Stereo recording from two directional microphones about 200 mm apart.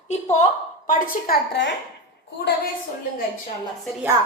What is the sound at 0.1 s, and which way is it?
Speech, 35° left (ahead or behind).